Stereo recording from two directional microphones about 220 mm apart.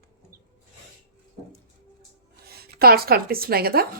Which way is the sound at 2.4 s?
45° right (ahead or behind).